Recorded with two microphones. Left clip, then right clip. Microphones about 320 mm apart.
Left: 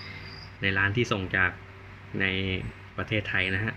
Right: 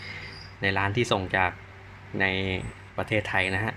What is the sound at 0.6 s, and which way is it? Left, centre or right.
Speech, centre.